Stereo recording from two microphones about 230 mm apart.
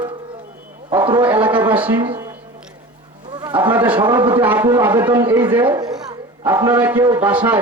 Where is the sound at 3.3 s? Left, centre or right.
Centre.